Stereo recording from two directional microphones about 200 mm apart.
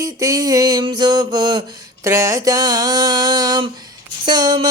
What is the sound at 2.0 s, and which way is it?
Mantra, 15° right (ahead or behind).